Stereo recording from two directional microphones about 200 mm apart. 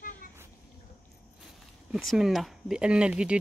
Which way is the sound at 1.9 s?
Centre (ahead or behind).